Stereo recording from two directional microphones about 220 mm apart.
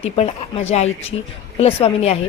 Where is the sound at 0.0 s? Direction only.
30° left (ahead or behind).